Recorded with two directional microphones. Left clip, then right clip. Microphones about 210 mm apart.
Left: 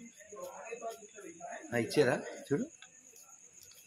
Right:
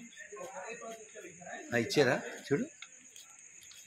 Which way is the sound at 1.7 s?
35° right (ahead or behind).